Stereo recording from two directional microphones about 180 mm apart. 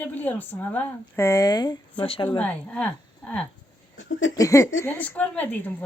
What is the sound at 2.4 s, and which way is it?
A woman's voice, 10° left (ahead or behind).